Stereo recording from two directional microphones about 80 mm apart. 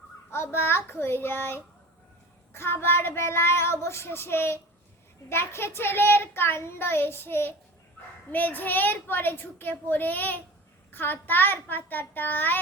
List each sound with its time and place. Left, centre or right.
0.3 s a child's voice: left
2.5 s child singing: left
5.3 s a child's voice: left